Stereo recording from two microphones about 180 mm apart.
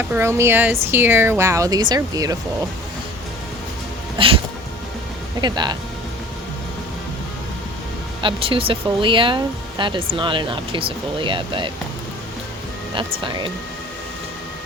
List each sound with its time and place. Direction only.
0.0 s speech: 15° right (ahead or behind)
4.2 s speech: 30° right (ahead or behind)
5.4 s speech: 25° right (ahead or behind)
8.2 s speech: 30° right (ahead or behind)
13.2 s speech: 25° right (ahead or behind)